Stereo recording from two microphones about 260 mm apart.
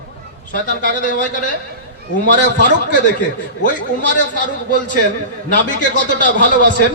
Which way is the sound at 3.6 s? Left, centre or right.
Left.